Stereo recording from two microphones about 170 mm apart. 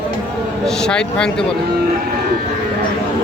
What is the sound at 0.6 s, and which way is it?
Speech, 5° left (ahead or behind).